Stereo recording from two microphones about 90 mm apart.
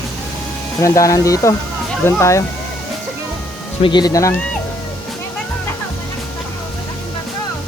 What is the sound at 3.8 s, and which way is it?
Speech, 60° left (ahead or behind).